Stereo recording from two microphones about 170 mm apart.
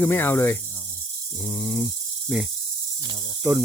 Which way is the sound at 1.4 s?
25° left (ahead or behind).